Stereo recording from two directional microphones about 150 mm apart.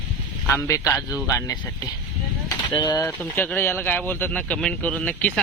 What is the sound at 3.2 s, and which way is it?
Speech, 10° left (ahead or behind).